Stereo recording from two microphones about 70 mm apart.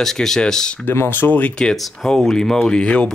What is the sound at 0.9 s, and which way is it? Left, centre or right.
Speech, left.